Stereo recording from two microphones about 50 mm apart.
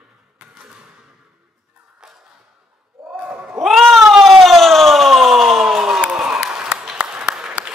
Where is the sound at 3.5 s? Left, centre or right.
Centre.